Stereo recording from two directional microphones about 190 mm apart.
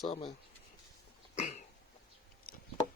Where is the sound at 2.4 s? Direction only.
50° left (ahead or behind).